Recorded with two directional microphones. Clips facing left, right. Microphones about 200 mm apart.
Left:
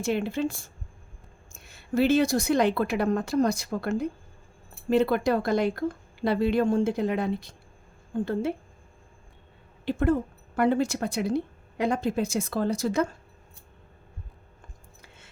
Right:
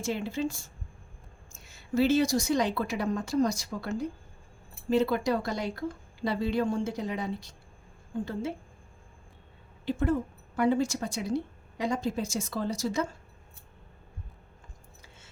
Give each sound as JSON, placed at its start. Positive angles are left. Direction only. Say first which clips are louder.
{"t": 0.0, "sound": "speech", "louder": "left 4 dB", "side_deg": 60}
{"t": 9.8, "sound": "speech", "louder": "left 4 dB", "side_deg": 60}